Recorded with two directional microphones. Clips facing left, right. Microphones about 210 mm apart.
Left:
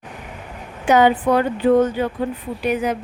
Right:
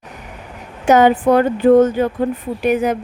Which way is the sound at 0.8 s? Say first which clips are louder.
Right 3 dB; 45° right (ahead or behind).